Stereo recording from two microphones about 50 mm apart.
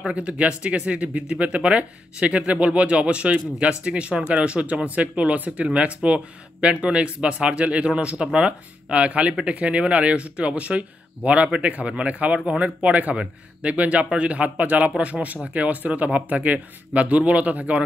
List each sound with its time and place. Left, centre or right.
0.0 s speech: right